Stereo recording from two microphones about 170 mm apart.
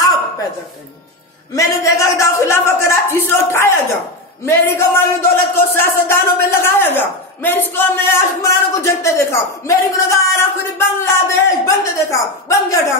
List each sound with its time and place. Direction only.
1.5 s a man's voice: 20° left (ahead or behind)